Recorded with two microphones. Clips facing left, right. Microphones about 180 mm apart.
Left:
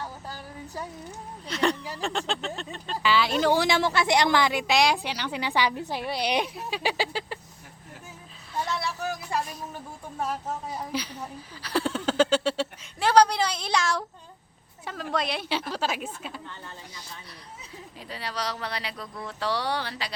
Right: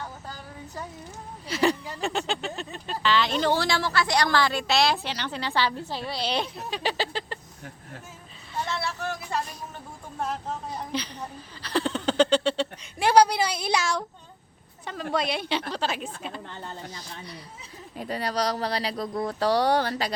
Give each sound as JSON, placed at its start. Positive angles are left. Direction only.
{"t": 1.5, "sound": "speech", "side_deg": -5}
{"t": 3.0, "sound": "a woman's voice", "side_deg": 10}
{"t": 8.6, "sound": "music", "side_deg": 10}
{"t": 10.2, "sound": "a woman's voice", "side_deg": 5}
{"t": 13.0, "sound": "a woman's voice", "side_deg": -10}
{"t": 17.9, "sound": "speech", "side_deg": -45}